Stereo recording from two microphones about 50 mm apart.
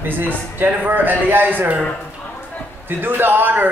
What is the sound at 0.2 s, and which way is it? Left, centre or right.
Speech, right.